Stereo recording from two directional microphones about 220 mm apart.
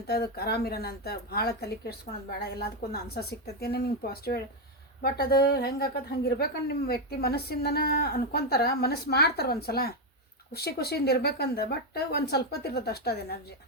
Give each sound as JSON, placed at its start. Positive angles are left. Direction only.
{"t": 0.1, "sound": "a woman's voice", "side_deg": 45}